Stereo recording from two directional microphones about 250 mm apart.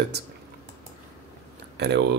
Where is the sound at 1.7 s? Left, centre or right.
Right.